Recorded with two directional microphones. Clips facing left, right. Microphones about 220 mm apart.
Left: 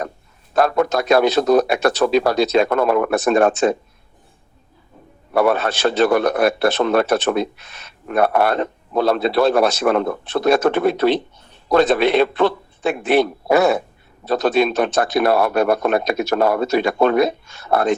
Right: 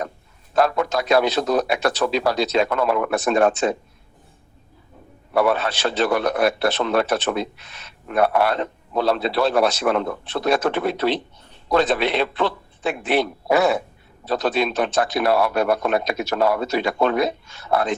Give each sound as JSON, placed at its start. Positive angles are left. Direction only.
{"t": 0.5, "sound": "a man's voice", "side_deg": 50}
{"t": 5.3, "sound": "a man's voice", "side_deg": 50}